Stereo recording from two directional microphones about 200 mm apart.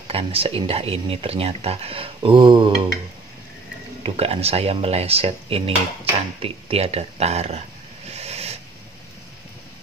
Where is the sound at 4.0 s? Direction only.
30° right (ahead or behind).